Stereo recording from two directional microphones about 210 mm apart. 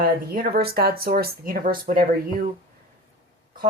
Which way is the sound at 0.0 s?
45° right (ahead or behind).